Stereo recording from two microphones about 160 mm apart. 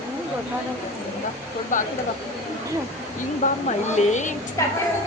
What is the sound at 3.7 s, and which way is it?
Speech, 50° left (ahead or behind).